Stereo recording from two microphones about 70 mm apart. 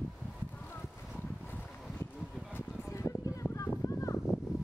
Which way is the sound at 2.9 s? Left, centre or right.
Left.